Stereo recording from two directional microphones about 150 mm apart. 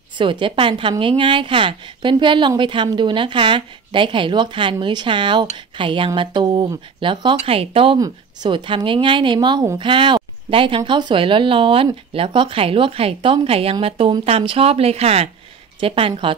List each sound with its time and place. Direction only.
0.2 s speech: 35° right (ahead or behind)